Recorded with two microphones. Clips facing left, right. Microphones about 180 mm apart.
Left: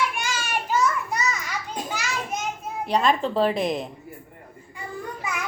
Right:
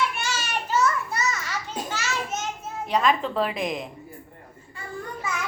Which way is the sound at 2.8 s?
35° left (ahead or behind).